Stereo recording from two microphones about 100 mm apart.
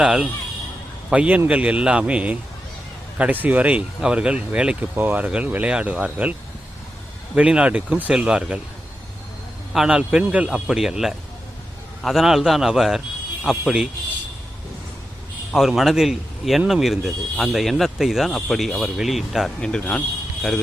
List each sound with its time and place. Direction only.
0.0 s speech: 10° right (ahead or behind)
7.3 s speech: 10° right (ahead or behind)
9.7 s speech: 5° right (ahead or behind)
15.5 s speech: centre (ahead or behind)
19.6 s speech: 10° left (ahead or behind)